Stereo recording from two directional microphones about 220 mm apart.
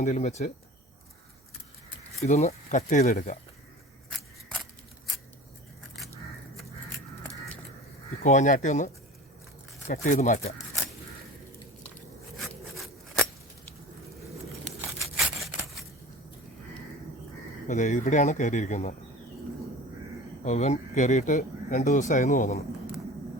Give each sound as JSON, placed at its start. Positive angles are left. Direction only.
{"t": 0.0, "sound": "speech", "side_deg": 35}
{"t": 2.1, "sound": "speech", "side_deg": 30}
{"t": 8.2, "sound": "speech", "side_deg": 35}
{"t": 9.9, "sound": "speech", "side_deg": 40}
{"t": 12.4, "sound": "a sound", "side_deg": 0}
{"t": 14.8, "sound": "a sound", "side_deg": 0}
{"t": 17.7, "sound": "speech", "side_deg": 35}
{"t": 20.4, "sound": "speech", "side_deg": 30}